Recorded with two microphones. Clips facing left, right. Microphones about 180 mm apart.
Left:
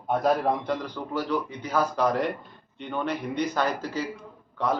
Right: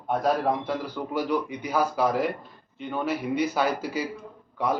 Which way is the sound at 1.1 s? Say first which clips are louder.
Right 1 dB; 10° right (ahead or behind).